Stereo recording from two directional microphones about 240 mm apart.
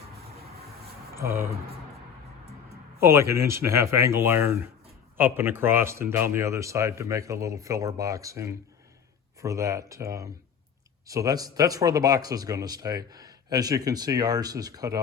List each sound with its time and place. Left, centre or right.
1.1 s speech: centre
3.0 s speech: centre